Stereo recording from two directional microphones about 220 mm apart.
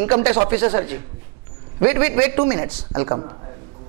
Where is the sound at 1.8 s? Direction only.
15° right (ahead or behind).